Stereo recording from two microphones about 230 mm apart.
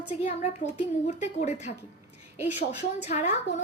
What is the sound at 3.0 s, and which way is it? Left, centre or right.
Speech, left.